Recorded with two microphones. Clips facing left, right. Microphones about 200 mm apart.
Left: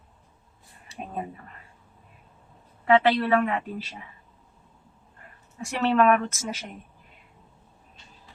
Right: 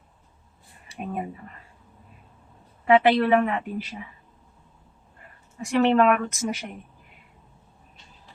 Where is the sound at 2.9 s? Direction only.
20° right (ahead or behind).